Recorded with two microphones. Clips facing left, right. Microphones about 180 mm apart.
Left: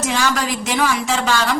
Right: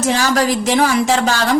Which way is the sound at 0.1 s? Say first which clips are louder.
Right 6 dB; 40° right (ahead or behind).